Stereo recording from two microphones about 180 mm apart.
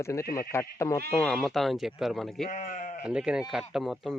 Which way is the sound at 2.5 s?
45° left (ahead or behind).